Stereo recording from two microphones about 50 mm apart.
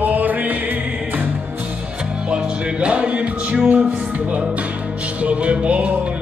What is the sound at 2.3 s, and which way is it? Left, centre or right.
Music, right.